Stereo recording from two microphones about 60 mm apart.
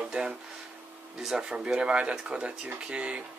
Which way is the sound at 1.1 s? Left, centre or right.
Centre.